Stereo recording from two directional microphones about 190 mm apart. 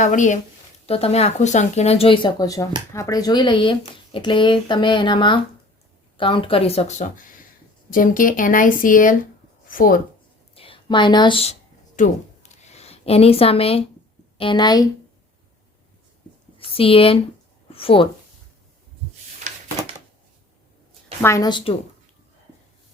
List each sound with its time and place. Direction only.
0.0 s speech: 40° left (ahead or behind)
10.5 s speech: 30° left (ahead or behind)
11.9 s a sound: 40° left (ahead or behind)
14.3 s speech: 25° left (ahead or behind)
16.6 s speech: 30° left (ahead or behind)
17.7 s a sound: 30° left (ahead or behind)
21.2 s speech: 15° left (ahead or behind)